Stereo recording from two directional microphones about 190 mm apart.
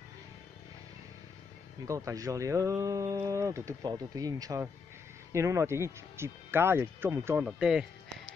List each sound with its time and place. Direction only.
1.9 s speech: 15° right (ahead or behind)